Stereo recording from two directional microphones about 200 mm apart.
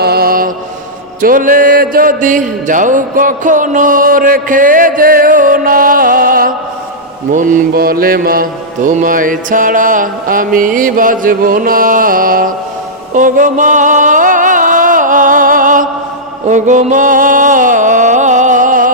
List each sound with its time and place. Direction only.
0.0 s mantra: 50° right (ahead or behind)
13.1 s music: 40° right (ahead or behind)